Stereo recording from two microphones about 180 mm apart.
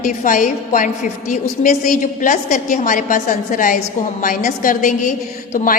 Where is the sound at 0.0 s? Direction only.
45° left (ahead or behind).